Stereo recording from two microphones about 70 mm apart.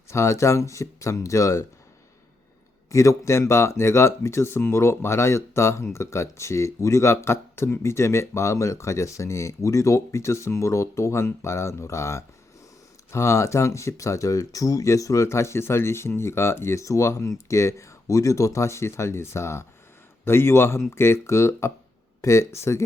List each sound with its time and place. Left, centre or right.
0.1 s speech: left
2.9 s speech: left